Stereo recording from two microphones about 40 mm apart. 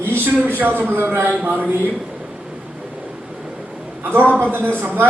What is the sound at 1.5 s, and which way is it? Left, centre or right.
Speech, right.